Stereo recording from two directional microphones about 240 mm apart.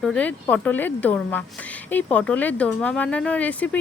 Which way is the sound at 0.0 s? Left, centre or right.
Centre.